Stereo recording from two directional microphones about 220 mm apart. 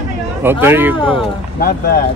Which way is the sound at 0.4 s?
10° right (ahead or behind).